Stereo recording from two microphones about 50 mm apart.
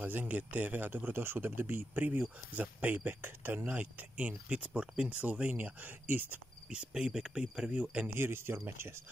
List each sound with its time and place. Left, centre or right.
0.0 s speech: right
4.3 s speech: right
5.2 s speech: right
6.7 s speech: centre
8.1 s speech: right